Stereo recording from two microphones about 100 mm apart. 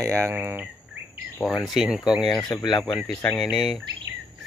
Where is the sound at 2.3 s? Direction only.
40° left (ahead or behind).